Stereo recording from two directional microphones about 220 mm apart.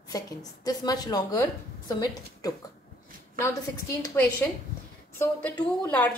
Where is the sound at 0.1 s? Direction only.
15° left (ahead or behind).